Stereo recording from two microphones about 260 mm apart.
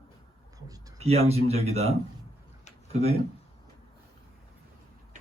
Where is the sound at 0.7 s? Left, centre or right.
Right.